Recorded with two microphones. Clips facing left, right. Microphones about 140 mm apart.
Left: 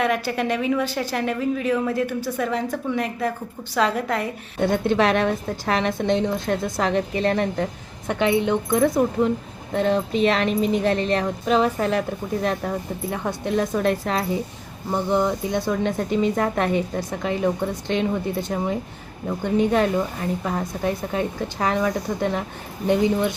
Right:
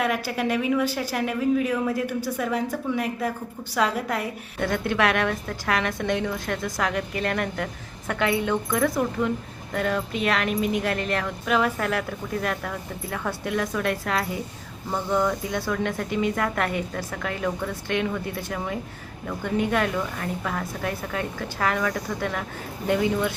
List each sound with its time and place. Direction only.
0.0 s a woman's voice: 5° right (ahead or behind)
4.6 s a woman's voice: 25° left (ahead or behind)